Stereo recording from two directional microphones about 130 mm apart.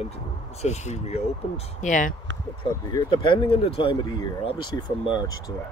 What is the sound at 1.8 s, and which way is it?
Speech, 80° left.